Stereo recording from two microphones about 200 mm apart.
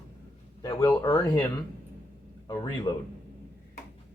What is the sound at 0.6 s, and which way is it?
Speech, 20° left (ahead or behind).